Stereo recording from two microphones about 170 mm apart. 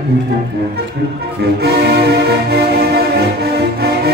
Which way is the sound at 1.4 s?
70° right (ahead or behind).